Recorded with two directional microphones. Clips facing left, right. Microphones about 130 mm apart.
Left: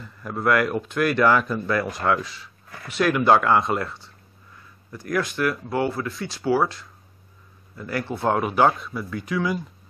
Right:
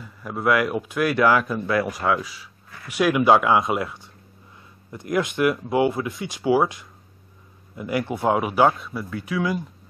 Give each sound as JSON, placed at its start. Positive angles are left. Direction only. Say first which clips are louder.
{"t": 0.0, "sound": "speech", "louder": "even", "side_deg": -5}